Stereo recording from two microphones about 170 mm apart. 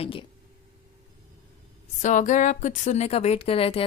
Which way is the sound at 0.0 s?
30° left (ahead or behind).